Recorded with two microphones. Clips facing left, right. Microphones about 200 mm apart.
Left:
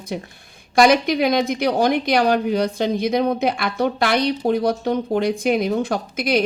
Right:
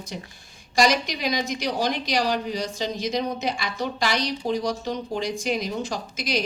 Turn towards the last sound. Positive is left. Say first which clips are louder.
# left 8 dB
turn(degrees=55)  # may be behind; listen again after turning